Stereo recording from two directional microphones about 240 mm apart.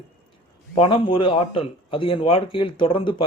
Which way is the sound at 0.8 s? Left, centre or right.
Left.